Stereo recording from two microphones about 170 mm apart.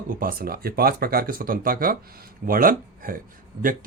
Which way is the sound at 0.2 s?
60° right (ahead or behind).